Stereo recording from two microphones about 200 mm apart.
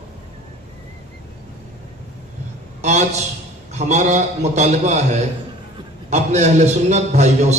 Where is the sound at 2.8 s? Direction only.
35° right (ahead or behind).